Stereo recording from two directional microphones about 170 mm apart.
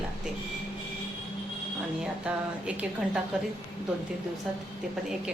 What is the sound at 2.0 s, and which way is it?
A woman's voice, 5° right (ahead or behind).